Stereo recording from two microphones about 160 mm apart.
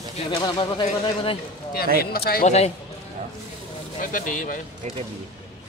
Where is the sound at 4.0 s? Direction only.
55° left (ahead or behind).